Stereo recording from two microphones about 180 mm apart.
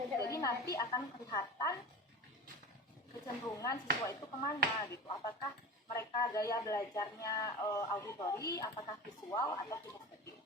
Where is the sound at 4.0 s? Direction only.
15° left (ahead or behind).